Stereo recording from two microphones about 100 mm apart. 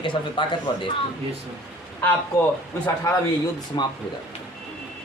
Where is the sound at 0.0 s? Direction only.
55° left (ahead or behind).